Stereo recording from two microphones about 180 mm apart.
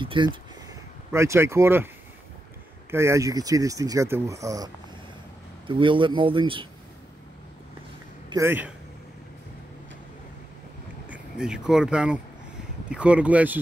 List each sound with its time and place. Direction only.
0.0 s speech: 30° right (ahead or behind)
1.1 s speech: 15° right (ahead or behind)
2.9 s speech: 15° right (ahead or behind)
5.7 s speech: 25° right (ahead or behind)
8.3 s a man's voice: 15° right (ahead or behind)
11.1 s speech: 5° right (ahead or behind)